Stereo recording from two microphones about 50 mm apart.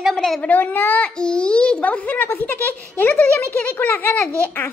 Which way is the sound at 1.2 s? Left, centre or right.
Centre.